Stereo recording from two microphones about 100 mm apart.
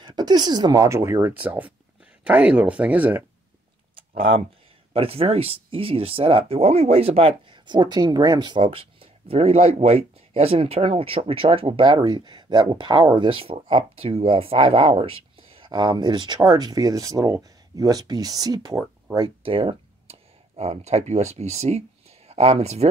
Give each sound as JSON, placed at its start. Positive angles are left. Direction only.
{"t": 0.0, "sound": "speech", "side_deg": -45}
{"t": 0.8, "sound": "speech", "side_deg": -25}
{"t": 3.9, "sound": "a sound", "side_deg": -65}
{"t": 4.9, "sound": "speech", "side_deg": -75}
{"t": 19.4, "sound": "speech", "side_deg": -65}